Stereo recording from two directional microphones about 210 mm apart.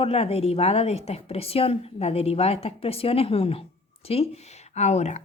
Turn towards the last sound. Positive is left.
turn(degrees=30)  # may be behind; listen again after turning